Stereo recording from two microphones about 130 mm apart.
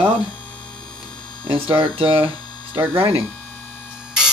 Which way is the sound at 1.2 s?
35° left (ahead or behind).